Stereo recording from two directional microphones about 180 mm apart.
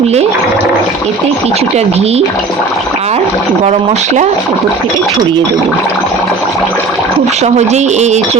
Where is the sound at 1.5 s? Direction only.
35° right (ahead or behind).